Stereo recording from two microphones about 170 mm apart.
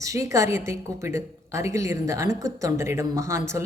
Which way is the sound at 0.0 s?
20° right (ahead or behind).